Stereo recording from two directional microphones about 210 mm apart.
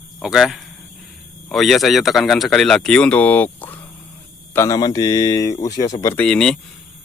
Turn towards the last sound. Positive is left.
turn(degrees=5)  # may be behind; listen again after turning